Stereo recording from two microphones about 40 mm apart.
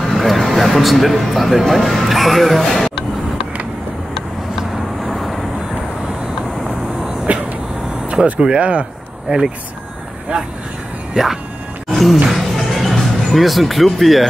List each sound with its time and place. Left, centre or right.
0.0 s speech: centre
4.6 s vehicle: centre
7.3 s vehicle: right
8.4 s speech: right
11.9 s music: centre